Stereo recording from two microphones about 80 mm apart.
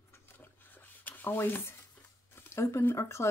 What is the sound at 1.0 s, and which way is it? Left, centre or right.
Rub, left.